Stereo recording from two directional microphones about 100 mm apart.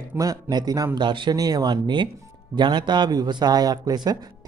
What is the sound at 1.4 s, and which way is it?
A man's voice, 40° right (ahead or behind).